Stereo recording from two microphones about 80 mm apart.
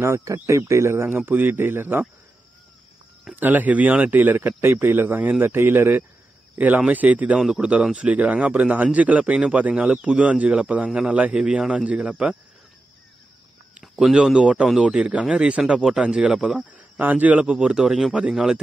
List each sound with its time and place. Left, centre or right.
0.0 s speech: right
3.3 s speech: right
7.3 s a man's voice: centre
13.7 s a man's voice: centre
17.0 s a man's voice: centre